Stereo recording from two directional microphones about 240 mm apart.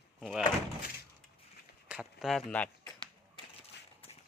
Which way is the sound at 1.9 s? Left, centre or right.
Centre.